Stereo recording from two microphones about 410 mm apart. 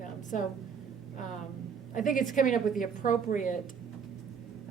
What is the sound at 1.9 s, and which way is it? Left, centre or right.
A woman's voice, centre.